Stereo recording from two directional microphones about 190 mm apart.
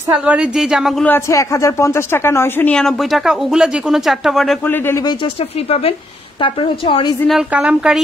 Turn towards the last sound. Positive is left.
turn(degrees=-5)  # may be behind; listen again after turning